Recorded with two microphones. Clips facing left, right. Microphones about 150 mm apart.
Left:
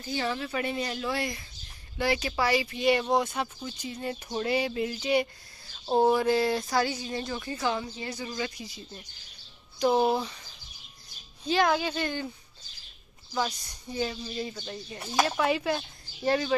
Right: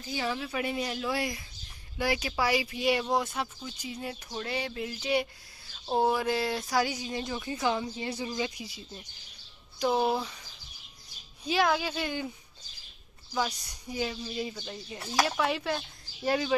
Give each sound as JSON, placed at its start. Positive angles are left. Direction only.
{"t": 0.0, "sound": "speech", "side_deg": -5}
{"t": 4.5, "sound": "speech", "side_deg": 5}
{"t": 11.4, "sound": "speech", "side_deg": -5}
{"t": 13.3, "sound": "speech", "side_deg": -5}
{"t": 15.0, "sound": "speech", "side_deg": 10}